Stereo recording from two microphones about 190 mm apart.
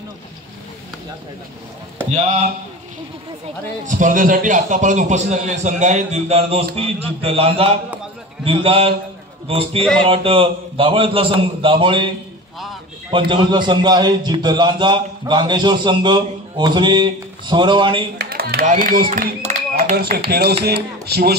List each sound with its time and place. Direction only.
3.8 s a man's voice: 45° right (ahead or behind); by 12.1 s 25° right (ahead or behind)
13.3 s a man's voice: 25° right (ahead or behind)
18.1 s speech: 55° right (ahead or behind)